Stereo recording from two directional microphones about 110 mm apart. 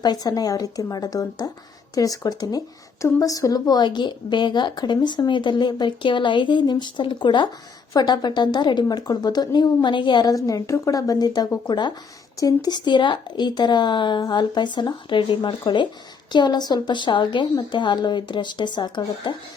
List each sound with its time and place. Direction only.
0.0 s a woman's voice: 35° left (ahead or behind)